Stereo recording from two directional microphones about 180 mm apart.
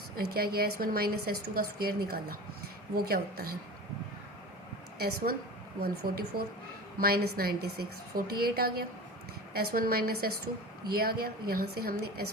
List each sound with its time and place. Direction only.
0.2 s a woman's voice: 60° right (ahead or behind)
4.9 s a woman's voice: 60° right (ahead or behind)